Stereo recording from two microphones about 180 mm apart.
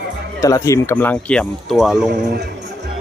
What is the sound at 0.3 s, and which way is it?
Speech, 15° left (ahead or behind).